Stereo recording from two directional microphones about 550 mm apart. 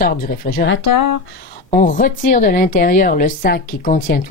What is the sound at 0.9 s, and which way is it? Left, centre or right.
Speech, left.